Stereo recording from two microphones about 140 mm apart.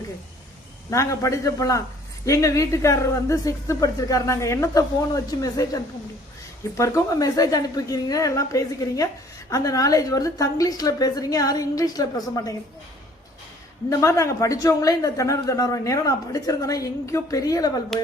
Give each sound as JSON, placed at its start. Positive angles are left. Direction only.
{"t": 0.9, "sound": "a man's voice", "side_deg": 20}
{"t": 13.9, "sound": "a man's voice", "side_deg": 20}
{"t": 17.9, "sound": "a sound", "side_deg": 0}